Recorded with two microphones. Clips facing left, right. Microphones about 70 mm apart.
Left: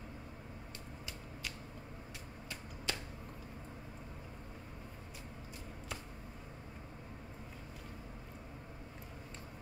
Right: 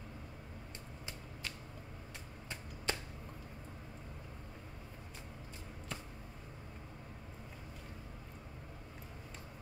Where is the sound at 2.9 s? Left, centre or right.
Right.